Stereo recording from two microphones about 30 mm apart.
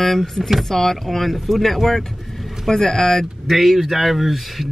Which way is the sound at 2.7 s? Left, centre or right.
Centre.